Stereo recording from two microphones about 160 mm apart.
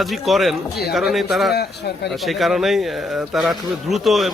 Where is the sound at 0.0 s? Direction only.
Centre (ahead or behind).